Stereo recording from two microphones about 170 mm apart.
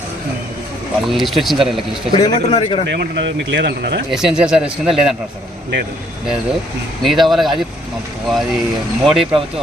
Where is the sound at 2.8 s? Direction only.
85° right.